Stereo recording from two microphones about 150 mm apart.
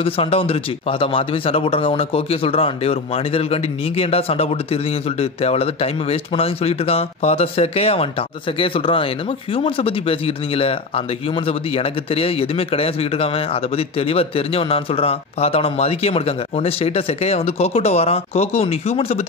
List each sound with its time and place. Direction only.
0.0 s speech: 40° left (ahead or behind)